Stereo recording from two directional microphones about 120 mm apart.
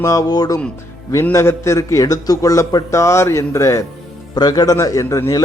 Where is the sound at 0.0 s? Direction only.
30° left (ahead or behind).